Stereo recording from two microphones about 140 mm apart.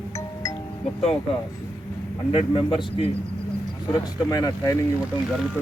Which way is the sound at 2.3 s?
35° left (ahead or behind).